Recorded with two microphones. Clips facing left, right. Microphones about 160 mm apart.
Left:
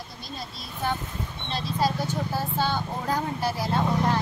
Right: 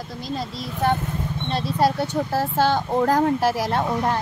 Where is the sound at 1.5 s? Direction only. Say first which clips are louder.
Right 5 dB; 70° right (ahead or behind); by 3.8 s 90° right.